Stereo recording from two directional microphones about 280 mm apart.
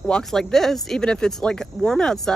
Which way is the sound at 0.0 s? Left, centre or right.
Centre.